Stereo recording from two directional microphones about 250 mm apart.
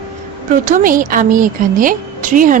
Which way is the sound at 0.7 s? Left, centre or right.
Right.